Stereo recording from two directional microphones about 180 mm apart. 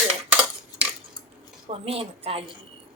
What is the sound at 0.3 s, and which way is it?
Cutlery, 5° right (ahead or behind).